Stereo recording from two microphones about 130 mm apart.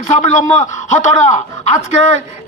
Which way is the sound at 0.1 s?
60° left (ahead or behind).